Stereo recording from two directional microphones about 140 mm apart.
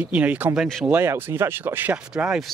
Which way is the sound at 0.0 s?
10° right (ahead or behind).